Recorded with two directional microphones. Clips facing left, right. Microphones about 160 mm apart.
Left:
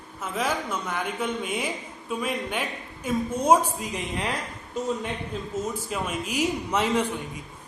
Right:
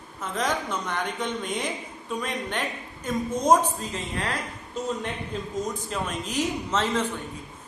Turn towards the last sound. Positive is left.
turn(degrees=10)  # may be behind; listen again after turning